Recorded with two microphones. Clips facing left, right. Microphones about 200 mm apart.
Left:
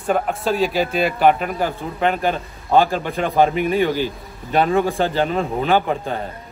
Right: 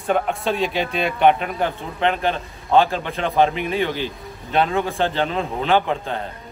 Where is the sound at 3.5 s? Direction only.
50° left (ahead or behind).